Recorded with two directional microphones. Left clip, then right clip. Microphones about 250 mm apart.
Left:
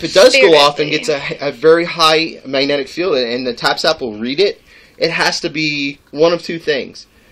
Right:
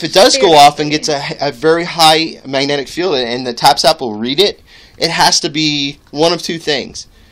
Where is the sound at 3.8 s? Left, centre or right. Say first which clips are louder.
Right 4 dB; right.